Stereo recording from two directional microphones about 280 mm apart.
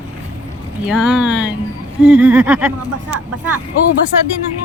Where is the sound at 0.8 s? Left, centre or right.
Centre.